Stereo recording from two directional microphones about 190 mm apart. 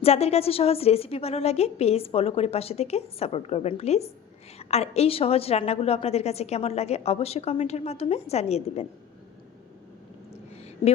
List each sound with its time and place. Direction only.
0.0 s a woman's voice: 35° left (ahead or behind)